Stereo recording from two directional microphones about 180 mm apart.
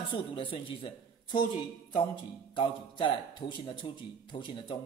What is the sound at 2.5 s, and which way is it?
Speech, 25° left (ahead or behind).